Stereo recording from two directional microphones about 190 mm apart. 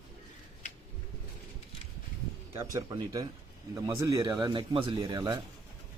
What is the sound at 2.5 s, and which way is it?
Speech, 15° right (ahead or behind).